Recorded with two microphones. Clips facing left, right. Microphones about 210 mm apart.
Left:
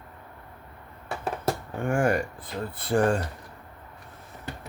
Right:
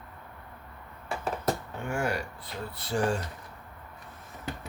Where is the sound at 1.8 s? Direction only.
50° left (ahead or behind).